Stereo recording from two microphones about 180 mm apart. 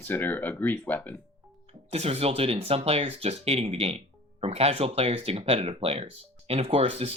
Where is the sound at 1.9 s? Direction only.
35° right (ahead or behind).